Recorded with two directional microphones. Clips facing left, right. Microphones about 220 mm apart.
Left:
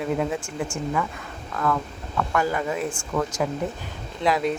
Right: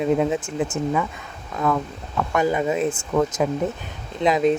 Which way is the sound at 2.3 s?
20° right (ahead or behind).